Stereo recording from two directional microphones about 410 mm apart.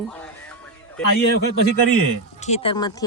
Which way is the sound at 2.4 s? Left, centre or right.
Centre.